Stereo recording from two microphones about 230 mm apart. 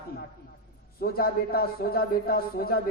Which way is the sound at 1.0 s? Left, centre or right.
Left.